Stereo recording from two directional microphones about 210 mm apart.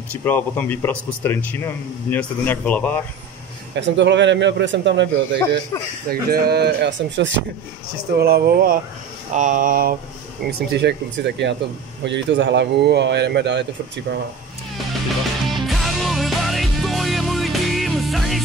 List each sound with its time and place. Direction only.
0.1 s speech: 10° left (ahead or behind)
3.7 s a man's voice: 60° right (ahead or behind)
6.0 s speech: 45° right (ahead or behind)
8.2 s speech: 45° right (ahead or behind)
9.3 s a sound: 40° right (ahead or behind)
10.4 s a man's voice: 55° right (ahead or behind)
15.4 s music: centre (ahead or behind)